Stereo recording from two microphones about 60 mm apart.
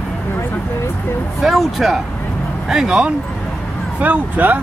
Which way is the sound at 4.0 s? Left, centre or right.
Right.